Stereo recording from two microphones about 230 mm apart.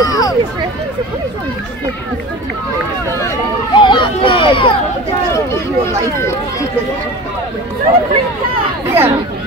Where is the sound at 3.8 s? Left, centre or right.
Left.